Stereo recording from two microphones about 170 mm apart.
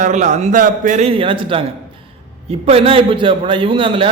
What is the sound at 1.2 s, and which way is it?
Speech, 30° right (ahead or behind).